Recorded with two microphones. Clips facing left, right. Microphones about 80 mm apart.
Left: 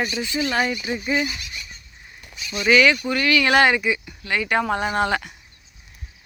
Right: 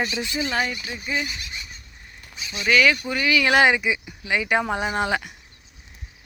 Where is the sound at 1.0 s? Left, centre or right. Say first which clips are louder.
Left 3 dB; left.